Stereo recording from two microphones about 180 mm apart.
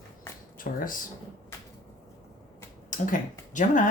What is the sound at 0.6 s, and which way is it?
Speech, 50° left (ahead or behind).